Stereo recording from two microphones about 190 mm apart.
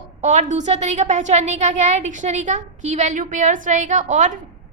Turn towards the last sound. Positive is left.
turn(degrees=-40)  # may be behind; listen again after turning